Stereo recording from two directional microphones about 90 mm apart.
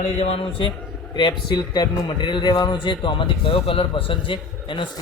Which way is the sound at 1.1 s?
55° left (ahead or behind).